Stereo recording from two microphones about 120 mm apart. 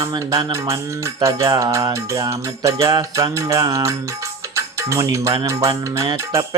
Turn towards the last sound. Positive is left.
turn(degrees=-25)  # may be behind; listen again after turning